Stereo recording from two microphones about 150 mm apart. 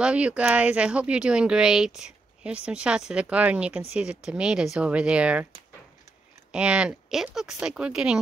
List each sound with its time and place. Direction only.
0.0 s speech: 5° right (ahead or behind)
6.5 s speech: 5° right (ahead or behind)